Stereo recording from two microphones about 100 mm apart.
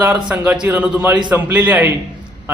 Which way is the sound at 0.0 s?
10° right (ahead or behind).